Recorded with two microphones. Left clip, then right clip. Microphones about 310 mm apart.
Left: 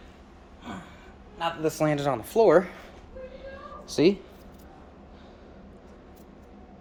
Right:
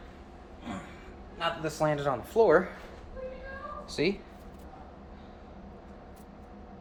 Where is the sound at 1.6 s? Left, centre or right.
Left.